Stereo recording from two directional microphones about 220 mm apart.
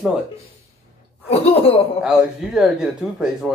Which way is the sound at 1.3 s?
25° left (ahead or behind).